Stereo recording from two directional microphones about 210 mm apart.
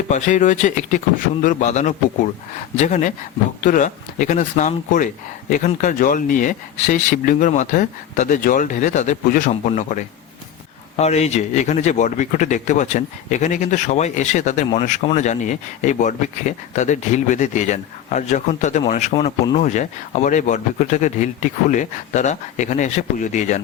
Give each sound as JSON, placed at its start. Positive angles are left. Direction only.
{"t": 0.1, "sound": "speech", "side_deg": 35}